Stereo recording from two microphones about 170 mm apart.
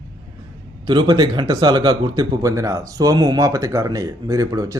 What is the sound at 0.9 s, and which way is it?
Speech, 25° right (ahead or behind).